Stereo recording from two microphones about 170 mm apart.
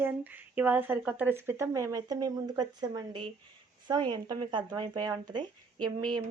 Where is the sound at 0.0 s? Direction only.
10° right (ahead or behind).